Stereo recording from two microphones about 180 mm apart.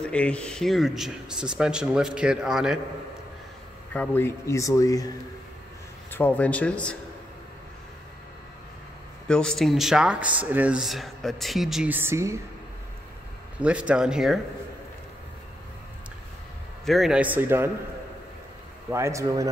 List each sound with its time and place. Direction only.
0.0 s speech: 5° left (ahead or behind)
3.9 s speech: 10° left (ahead or behind)
6.1 s speech: 10° left (ahead or behind)
9.3 s speech: 5° left (ahead or behind); by 12.4 s 15° right (ahead or behind)
13.6 s speech: 5° right (ahead or behind)
16.8 s speech: centre (ahead or behind)
18.9 s speech: 15° right (ahead or behind)